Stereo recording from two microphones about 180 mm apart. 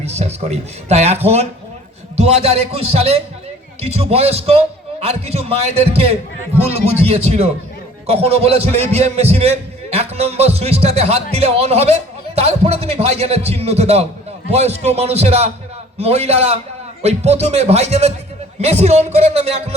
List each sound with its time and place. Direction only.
0.0 s a man's voice: 35° right (ahead or behind)